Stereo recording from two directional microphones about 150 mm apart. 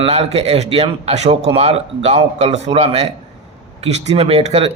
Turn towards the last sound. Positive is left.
turn(degrees=-45)  # may be behind; listen again after turning